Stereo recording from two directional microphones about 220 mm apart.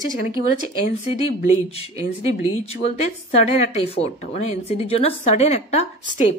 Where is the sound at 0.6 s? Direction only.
30° left (ahead or behind).